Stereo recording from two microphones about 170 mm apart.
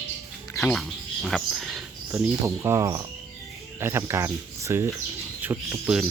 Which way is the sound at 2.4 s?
15° right (ahead or behind).